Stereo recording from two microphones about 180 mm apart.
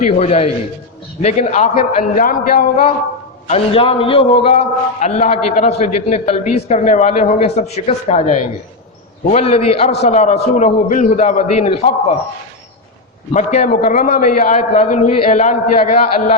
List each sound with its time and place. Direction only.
0.0 s a woman's voice: 35° left (ahead or behind); by 2.6 s 50° left (ahead or behind)
3.4 s a woman's voice: 35° left (ahead or behind)
13.3 s a woman's voice: 40° left (ahead or behind)